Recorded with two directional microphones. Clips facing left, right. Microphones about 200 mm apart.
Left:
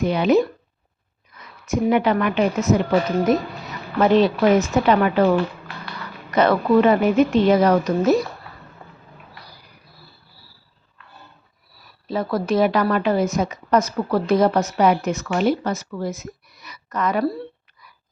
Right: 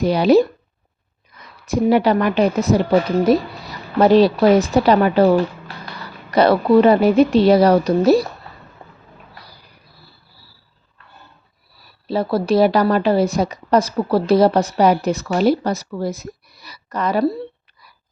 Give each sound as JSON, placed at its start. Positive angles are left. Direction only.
{"t": 0.0, "sound": "speech", "side_deg": -35}
{"t": 1.6, "sound": "speech", "side_deg": -35}
{"t": 12.0, "sound": "speech", "side_deg": -30}